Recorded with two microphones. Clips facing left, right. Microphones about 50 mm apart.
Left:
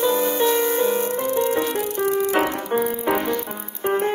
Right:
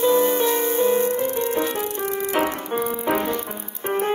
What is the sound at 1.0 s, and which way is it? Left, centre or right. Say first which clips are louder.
Music: left 1 dB; left.